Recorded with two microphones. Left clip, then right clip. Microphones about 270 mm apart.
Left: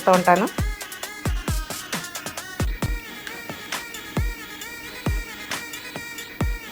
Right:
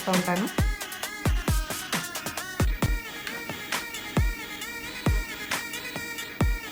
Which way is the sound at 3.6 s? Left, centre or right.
Centre.